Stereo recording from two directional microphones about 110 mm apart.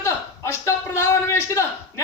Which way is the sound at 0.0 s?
25° left (ahead or behind).